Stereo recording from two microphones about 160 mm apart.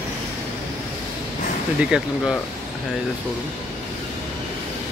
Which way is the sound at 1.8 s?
5° right (ahead or behind).